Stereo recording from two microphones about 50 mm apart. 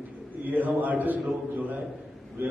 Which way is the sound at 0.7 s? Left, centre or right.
Right.